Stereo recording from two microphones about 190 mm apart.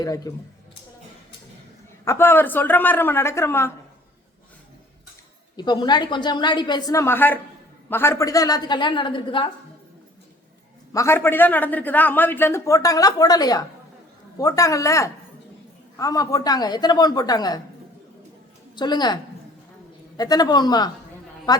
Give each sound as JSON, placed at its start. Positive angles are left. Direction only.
{"t": 0.0, "sound": "a woman's voice", "side_deg": 20}
{"t": 2.0, "sound": "a man's voice", "side_deg": 10}
{"t": 5.5, "sound": "a woman's voice", "side_deg": 25}
{"t": 10.9, "sound": "a man's voice", "side_deg": 15}
{"t": 18.8, "sound": "a woman's voice", "side_deg": 20}